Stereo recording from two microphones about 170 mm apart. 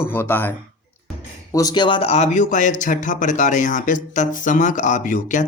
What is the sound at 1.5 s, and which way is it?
A man's voice, 20° left (ahead or behind).